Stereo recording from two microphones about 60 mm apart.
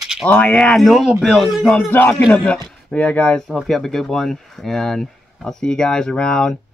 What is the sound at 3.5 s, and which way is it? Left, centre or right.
Speech, centre.